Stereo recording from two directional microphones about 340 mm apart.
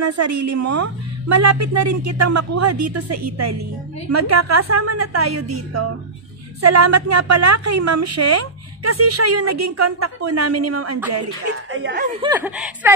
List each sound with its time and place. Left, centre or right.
0.0 s a woman's voice: right
11.7 s speech: right
12.2 s speech: centre